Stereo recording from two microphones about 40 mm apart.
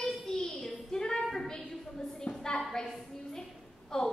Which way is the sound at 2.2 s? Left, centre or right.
Centre.